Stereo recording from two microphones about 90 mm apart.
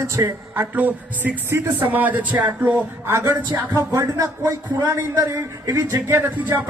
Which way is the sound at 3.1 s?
30° right (ahead or behind).